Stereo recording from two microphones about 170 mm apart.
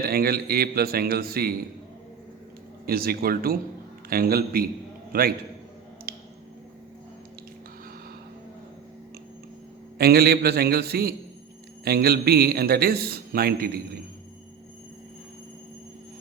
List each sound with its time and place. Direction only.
0.0 s a man's voice: 60° right (ahead or behind)
2.8 s a man's voice: 60° right (ahead or behind)
6.1 s a sound: 65° right (ahead or behind)
10.0 s a man's voice: 65° right (ahead or behind)